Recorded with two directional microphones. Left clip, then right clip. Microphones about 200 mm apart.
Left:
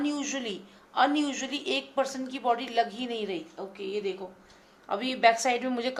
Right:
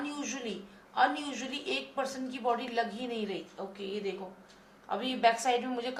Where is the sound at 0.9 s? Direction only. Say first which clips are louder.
Left 3 dB; 45° left (ahead or behind).